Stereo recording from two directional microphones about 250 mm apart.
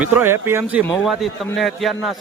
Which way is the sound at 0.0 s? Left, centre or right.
Centre.